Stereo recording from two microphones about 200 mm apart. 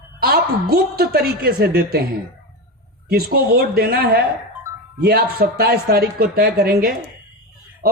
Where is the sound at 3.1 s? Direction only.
50° right (ahead or behind).